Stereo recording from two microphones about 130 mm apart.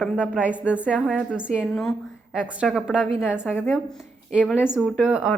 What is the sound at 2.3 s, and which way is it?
A woman's voice, 10° right (ahead or behind).